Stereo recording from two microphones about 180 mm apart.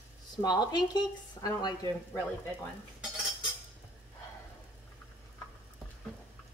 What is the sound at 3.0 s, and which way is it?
Cutlery, centre (ahead or behind).